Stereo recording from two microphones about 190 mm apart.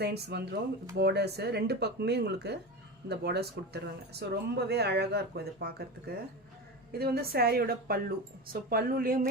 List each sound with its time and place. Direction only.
0.0 s a woman's voice: 60° right (ahead or behind)